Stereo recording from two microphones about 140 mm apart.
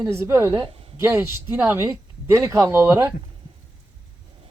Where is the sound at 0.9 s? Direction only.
20° right (ahead or behind).